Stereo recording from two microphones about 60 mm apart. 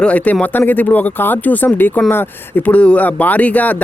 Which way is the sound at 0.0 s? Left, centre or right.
Centre.